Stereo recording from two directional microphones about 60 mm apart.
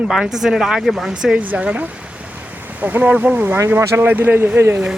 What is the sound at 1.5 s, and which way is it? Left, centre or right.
Speech, right.